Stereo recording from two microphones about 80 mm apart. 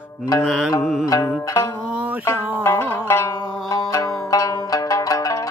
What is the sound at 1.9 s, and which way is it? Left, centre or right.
Music, centre.